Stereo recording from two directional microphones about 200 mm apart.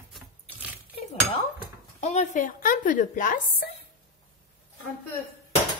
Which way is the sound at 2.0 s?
35° left (ahead or behind).